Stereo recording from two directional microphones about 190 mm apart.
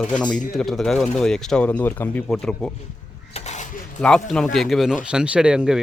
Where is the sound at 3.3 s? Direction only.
35° left (ahead or behind).